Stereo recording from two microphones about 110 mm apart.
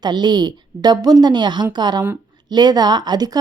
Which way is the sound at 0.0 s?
40° right (ahead or behind).